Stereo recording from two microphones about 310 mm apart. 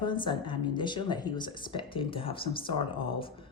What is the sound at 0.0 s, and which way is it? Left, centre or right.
A man's voice, centre.